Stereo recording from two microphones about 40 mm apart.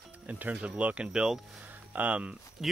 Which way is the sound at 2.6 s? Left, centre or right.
Centre.